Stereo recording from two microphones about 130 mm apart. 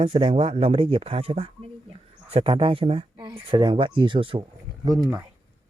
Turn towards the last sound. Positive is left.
turn(degrees=-25)  # may be behind; listen again after turning